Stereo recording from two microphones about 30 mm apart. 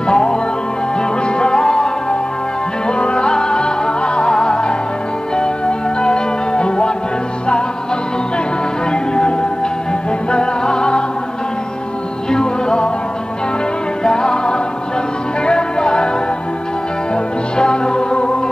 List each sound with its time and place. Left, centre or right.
0.0 s music: left
8.9 s music: left
12.3 s music: left
14.0 s music: left
17.1 s music: left